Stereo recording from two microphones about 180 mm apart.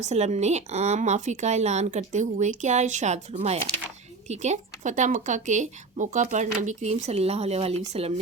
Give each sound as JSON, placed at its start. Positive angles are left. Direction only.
{"t": 0.0, "sound": "speech", "side_deg": -40}